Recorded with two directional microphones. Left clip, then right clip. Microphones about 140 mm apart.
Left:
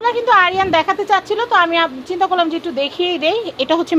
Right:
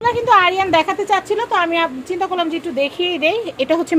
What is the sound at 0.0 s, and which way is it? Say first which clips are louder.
A woman's voice: even; 15° right (ahead or behind).